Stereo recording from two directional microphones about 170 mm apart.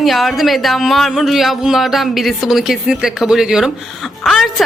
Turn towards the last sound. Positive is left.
turn(degrees=0)  # may be behind; listen again after turning